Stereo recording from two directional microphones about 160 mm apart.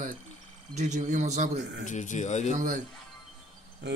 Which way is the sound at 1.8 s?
50° left (ahead or behind).